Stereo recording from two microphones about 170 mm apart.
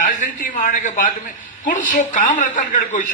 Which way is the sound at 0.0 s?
50° left (ahead or behind).